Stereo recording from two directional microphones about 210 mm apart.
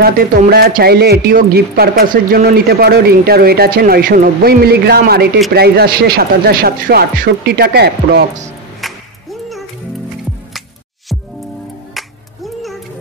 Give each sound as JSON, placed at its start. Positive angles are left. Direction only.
{"t": 0.0, "sound": "speech", "side_deg": -45}
{"t": 8.8, "sound": "music", "side_deg": 0}